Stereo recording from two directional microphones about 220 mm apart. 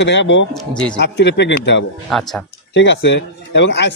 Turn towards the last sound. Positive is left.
turn(degrees=55)  # may be behind; listen again after turning